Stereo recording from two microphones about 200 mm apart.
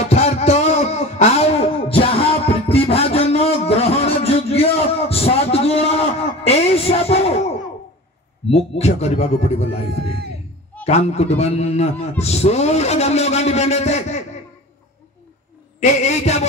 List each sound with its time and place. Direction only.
0.1 s a sound: 30° left (ahead or behind)
8.5 s a man's voice: 30° left (ahead or behind)
15.8 s a man's voice: 35° left (ahead or behind)